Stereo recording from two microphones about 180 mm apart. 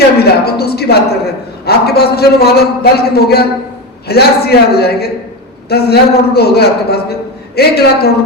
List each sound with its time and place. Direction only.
0.2 s a man's voice: 60° left (ahead or behind)